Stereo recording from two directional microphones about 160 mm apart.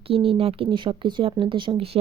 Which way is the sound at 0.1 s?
35° right (ahead or behind).